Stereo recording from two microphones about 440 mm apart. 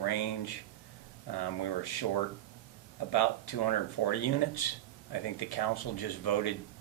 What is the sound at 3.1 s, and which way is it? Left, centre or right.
Speech, left.